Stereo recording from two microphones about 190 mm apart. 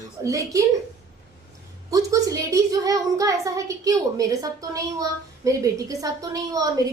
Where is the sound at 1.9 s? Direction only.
20° right (ahead or behind).